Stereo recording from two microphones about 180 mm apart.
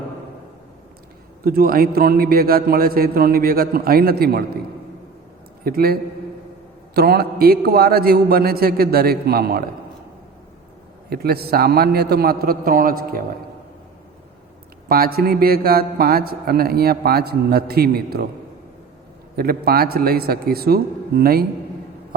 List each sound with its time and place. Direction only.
1.5 s a man's voice: 55° right (ahead or behind)
5.6 s a man's voice: 55° right (ahead or behind)
11.1 s a man's voice: 60° right (ahead or behind)
14.8 s a man's voice: 55° right (ahead or behind)
19.4 s a man's voice: 55° right (ahead or behind)